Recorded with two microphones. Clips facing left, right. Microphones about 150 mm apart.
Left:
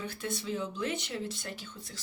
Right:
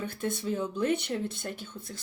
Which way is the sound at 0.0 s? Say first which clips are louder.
Right 4 dB; 50° right (ahead or behind).